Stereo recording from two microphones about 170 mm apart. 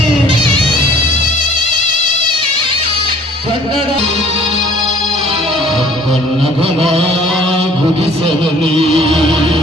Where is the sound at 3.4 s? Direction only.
35° right (ahead or behind).